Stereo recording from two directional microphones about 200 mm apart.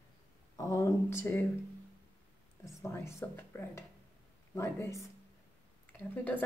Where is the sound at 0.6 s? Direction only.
15° left (ahead or behind).